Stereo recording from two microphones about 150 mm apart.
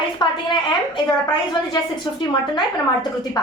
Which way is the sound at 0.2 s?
30° left (ahead or behind).